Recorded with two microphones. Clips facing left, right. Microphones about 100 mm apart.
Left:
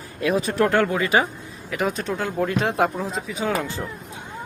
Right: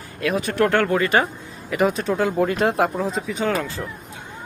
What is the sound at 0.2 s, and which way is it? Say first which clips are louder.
Speech: left 1 dB; 25° left (ahead or behind).